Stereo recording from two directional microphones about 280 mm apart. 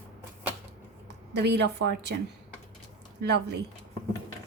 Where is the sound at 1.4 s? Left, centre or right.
Right.